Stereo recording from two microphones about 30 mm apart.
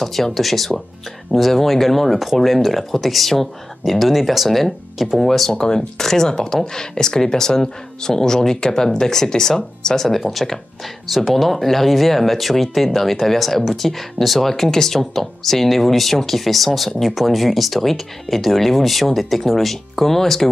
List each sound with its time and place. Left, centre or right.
0.0 s speech: centre
5.5 s speech: left
5.8 s speech: centre
10.1 s speech: centre